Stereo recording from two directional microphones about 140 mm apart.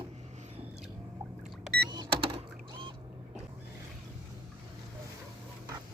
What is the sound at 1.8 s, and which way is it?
Power windows, 35° right (ahead or behind).